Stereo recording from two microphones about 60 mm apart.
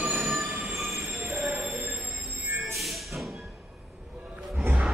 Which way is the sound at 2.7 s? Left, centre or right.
Centre.